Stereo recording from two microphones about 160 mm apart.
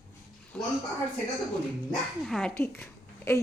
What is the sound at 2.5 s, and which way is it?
Speech, 15° left (ahead or behind).